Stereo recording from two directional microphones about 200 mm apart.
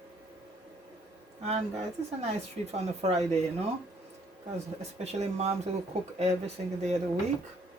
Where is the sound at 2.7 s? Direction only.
30° right (ahead or behind).